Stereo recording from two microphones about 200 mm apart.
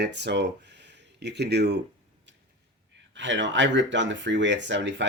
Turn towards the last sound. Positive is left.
turn(degrees=-65)  # may be behind; listen again after turning